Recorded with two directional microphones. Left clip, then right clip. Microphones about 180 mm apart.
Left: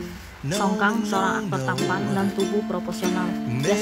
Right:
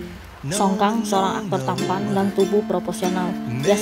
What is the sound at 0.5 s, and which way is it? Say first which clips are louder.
Speech: right 3 dB; centre (ahead or behind).